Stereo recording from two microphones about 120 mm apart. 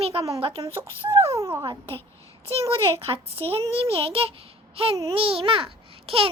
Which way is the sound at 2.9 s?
50° right (ahead or behind).